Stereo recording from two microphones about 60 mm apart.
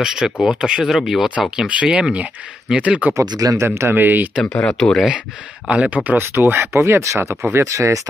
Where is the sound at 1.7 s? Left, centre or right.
Right.